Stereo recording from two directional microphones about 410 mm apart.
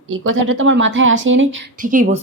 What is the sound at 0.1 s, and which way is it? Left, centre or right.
A woman's voice, right.